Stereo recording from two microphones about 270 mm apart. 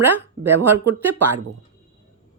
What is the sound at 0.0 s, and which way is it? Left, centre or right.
Speech, centre.